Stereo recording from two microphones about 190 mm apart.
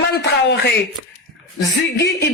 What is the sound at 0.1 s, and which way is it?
Speech, 65° left (ahead or behind).